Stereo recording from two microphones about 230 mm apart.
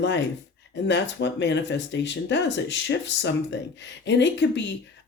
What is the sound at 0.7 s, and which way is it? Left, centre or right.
A woman's voice, left.